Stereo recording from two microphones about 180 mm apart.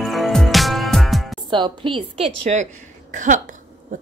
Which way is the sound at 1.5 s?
25° right (ahead or behind).